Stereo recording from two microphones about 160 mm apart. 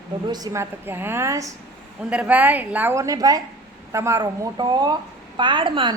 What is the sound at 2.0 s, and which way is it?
A woman's voice, 10° right (ahead or behind).